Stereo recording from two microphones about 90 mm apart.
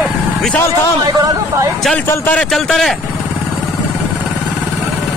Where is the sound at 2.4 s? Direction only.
5° left (ahead or behind).